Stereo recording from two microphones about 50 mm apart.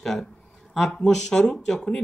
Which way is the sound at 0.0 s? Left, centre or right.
Centre.